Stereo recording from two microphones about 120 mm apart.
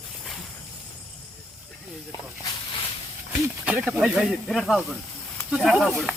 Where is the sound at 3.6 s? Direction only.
10° right (ahead or behind).